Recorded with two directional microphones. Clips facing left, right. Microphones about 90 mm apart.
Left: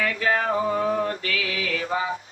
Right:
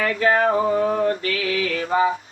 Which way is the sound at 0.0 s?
35° right (ahead or behind).